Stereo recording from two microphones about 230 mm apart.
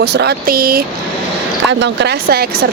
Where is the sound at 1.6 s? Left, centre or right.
Right.